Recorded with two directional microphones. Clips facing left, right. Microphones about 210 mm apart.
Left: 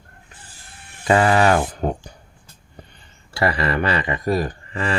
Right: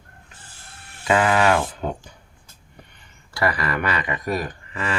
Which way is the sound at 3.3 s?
25° left (ahead or behind).